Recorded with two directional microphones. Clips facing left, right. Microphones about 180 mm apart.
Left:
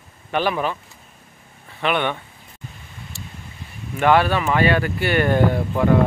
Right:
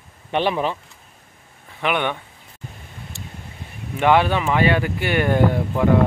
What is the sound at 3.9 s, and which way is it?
Speech, 15° right (ahead or behind).